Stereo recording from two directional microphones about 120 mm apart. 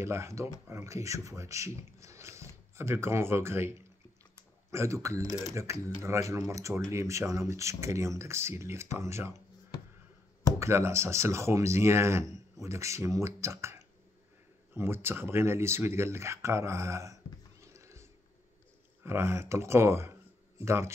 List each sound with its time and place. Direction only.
0.0 s speech: 25° right (ahead or behind)
10.6 s speech: 25° right (ahead or behind)
19.0 s speech: 20° right (ahead or behind)